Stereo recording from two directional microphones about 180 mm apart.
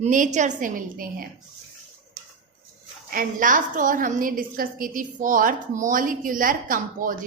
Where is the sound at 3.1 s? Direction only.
50° right (ahead or behind).